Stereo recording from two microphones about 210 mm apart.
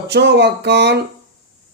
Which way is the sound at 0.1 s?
55° right (ahead or behind).